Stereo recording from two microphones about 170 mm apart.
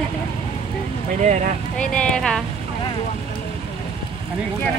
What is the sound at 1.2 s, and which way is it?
Speech, 45° right (ahead or behind).